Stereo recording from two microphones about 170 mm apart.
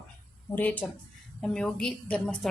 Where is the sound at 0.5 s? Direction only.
10° left (ahead or behind).